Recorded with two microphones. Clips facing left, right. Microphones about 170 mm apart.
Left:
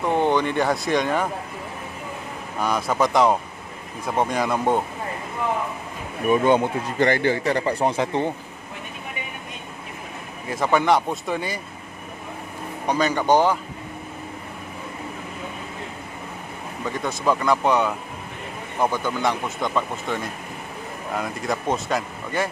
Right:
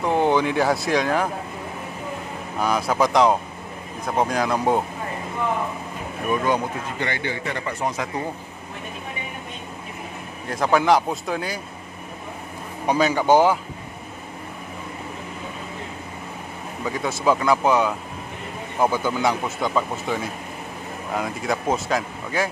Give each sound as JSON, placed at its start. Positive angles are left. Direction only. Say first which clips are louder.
{"t": 0.0, "sound": "speech", "louder": "right 1 dB", "side_deg": -5}
{"t": 2.6, "sound": "speech", "louder": "right 1 dB", "side_deg": 0}
{"t": 6.3, "sound": "speech", "louder": "left 4 dB", "side_deg": 25}
{"t": 7.0, "sound": "speech", "louder": "left 10 dB", "side_deg": 40}
{"t": 10.5, "sound": "speech", "louder": "right 1 dB", "side_deg": 0}
{"t": 12.8, "sound": "speech", "louder": "right 2 dB", "side_deg": -10}
{"t": 16.8, "sound": "speech", "louder": "right 2 dB", "side_deg": -5}